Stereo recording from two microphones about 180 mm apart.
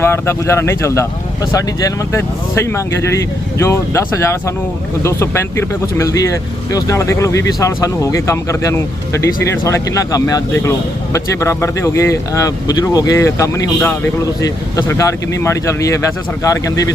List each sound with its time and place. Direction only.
0.0 s speech: 15° left (ahead or behind)